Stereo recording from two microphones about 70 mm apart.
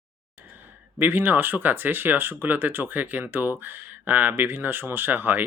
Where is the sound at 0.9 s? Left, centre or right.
Right.